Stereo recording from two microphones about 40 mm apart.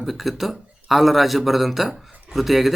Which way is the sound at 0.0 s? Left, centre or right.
Centre.